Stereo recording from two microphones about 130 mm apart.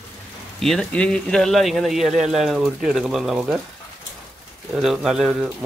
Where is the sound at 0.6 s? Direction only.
5° left (ahead or behind).